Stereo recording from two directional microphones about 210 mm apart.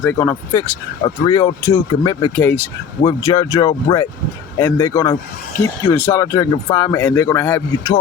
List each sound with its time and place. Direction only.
0.0 s speech: 10° left (ahead or behind)